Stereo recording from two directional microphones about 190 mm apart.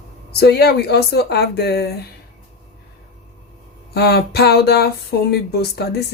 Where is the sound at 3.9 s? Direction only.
55° left (ahead or behind).